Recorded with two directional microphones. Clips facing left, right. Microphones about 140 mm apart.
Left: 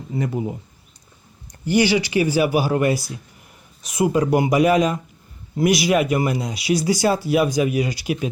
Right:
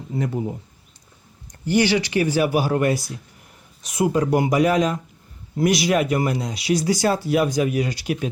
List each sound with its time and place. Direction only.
0.1 s speech: 5° left (ahead or behind)
1.6 s speech: 10° left (ahead or behind)